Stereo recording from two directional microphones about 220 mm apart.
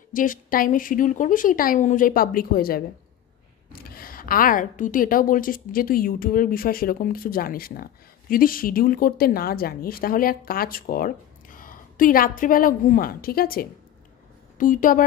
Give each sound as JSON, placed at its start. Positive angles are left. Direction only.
{"t": 0.1, "sound": "a woman's voice", "side_deg": 40}